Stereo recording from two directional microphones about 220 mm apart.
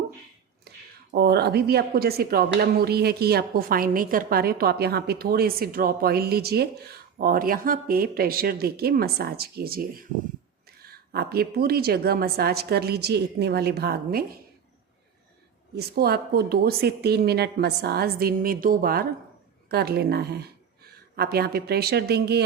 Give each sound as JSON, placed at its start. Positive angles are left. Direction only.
{"t": 0.7, "sound": "a sound", "side_deg": -45}
{"t": 1.1, "sound": "speech", "side_deg": -50}
{"t": 10.8, "sound": "speech", "side_deg": -45}
{"t": 15.7, "sound": "a woman's voice", "side_deg": -45}